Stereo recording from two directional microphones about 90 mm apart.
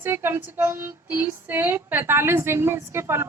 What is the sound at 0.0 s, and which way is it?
A woman's voice, 25° right (ahead or behind).